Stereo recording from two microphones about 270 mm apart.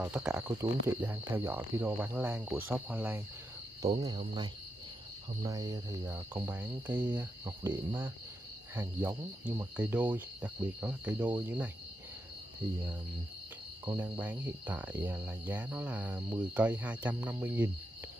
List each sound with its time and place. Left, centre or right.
0.0 s speech: centre
13.9 s speech: centre